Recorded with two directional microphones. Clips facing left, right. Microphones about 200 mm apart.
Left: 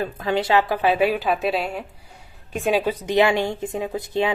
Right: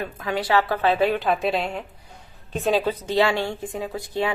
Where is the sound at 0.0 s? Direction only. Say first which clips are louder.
Left 4 dB; 30° left (ahead or behind).